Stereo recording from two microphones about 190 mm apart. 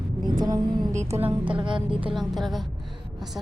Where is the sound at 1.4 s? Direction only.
25° right (ahead or behind).